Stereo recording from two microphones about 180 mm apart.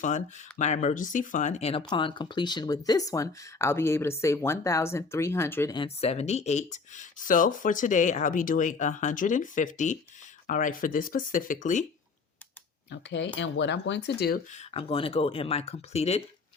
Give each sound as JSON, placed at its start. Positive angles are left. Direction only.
{"t": 0.0, "sound": "speech", "side_deg": 40}
{"t": 5.7, "sound": "speech", "side_deg": 30}
{"t": 12.9, "sound": "speech", "side_deg": 80}
{"t": 14.5, "sound": "speech", "side_deg": 35}